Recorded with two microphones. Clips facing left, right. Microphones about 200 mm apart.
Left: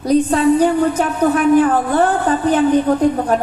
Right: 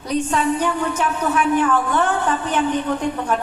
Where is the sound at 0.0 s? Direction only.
35° left (ahead or behind).